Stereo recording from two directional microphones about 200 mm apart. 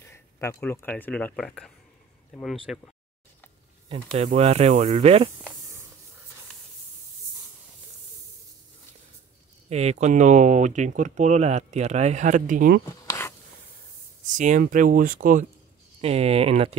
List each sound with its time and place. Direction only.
0.0 s speech: 10° left (ahead or behind); by 2.8 s 5° right (ahead or behind)
3.9 s speech: 35° right (ahead or behind)
9.7 s speech: 30° right (ahead or behind)
13.0 s a sound: 15° left (ahead or behind)
14.2 s speech: 40° right (ahead or behind)
16.0 s speech: 30° right (ahead or behind)